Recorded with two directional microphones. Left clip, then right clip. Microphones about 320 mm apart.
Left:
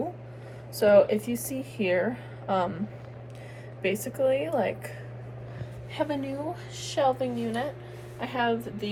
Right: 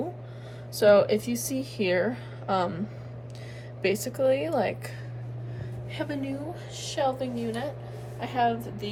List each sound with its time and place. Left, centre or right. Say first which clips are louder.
0.8 s a woman's voice: even; centre
3.8 s speech: right 1 dB; centre
5.9 s a woman's voice: left 3 dB; centre